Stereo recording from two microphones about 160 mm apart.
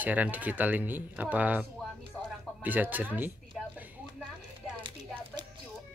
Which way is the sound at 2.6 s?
10° right (ahead or behind).